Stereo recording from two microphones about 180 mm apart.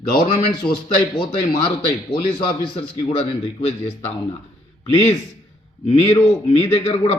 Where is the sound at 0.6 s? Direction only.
5° left (ahead or behind).